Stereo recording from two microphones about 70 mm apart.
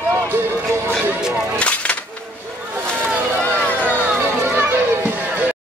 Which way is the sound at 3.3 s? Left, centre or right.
Left.